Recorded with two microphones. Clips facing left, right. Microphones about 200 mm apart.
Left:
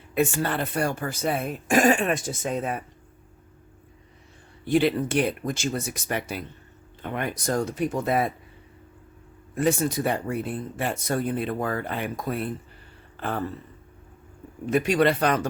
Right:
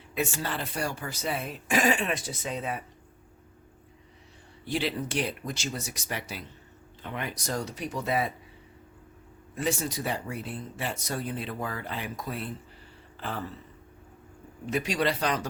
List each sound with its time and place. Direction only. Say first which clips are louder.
0.1 s speech: left 7 dB; 55° left (ahead or behind)
4.6 s speech: left 9 dB; 55° left (ahead or behind)
9.6 s speech: left 7 dB; 55° left (ahead or behind)
13.1 s a sound: left 6 dB; 55° left (ahead or behind)
14.7 s speech: left 7 dB; 55° left (ahead or behind)